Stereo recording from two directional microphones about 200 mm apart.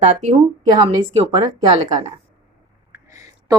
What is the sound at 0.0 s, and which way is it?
A woman's voice, 35° right (ahead or behind).